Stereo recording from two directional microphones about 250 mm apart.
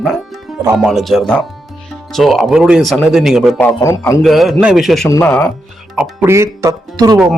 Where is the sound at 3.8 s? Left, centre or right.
Centre.